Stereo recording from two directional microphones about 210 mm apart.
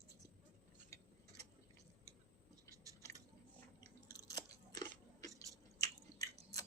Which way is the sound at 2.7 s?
15° right (ahead or behind).